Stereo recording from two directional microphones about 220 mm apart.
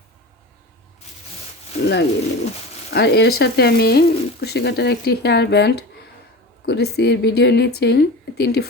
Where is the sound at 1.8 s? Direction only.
50° left (ahead or behind).